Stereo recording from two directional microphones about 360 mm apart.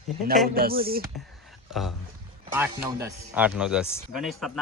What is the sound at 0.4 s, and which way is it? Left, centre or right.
Speech, right.